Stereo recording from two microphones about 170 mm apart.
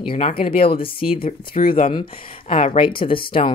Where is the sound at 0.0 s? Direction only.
30° left (ahead or behind).